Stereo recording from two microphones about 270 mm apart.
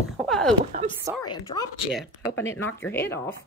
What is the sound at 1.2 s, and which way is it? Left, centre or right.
Speech, centre.